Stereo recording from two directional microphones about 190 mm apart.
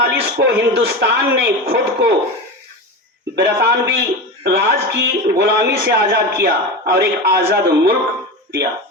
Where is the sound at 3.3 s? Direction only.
65° right (ahead or behind).